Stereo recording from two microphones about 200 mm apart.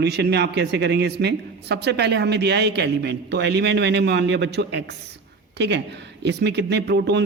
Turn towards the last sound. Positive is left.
turn(degrees=-60)  # may be behind; listen again after turning